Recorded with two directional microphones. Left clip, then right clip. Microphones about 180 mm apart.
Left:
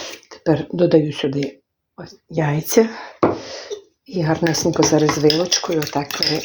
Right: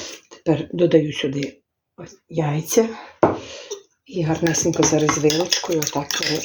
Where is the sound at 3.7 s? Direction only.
10° left (ahead or behind).